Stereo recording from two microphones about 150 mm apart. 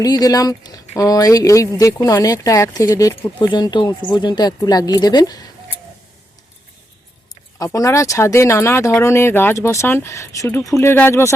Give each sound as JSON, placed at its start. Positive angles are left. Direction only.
{"t": 0.0, "sound": "speech", "side_deg": 25}
{"t": 7.6, "sound": "speech", "side_deg": 20}